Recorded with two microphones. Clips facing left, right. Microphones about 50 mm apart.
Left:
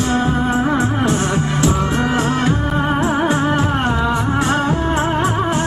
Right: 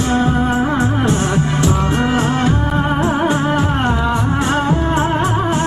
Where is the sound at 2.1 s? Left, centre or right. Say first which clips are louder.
Right 1 dB; right.